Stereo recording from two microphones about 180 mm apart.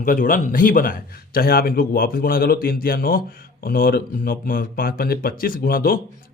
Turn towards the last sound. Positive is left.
turn(degrees=55)  # may be behind; listen again after turning